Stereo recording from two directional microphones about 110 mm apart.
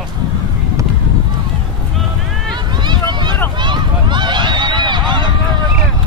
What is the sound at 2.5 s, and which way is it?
Vehicle, 40° right (ahead or behind).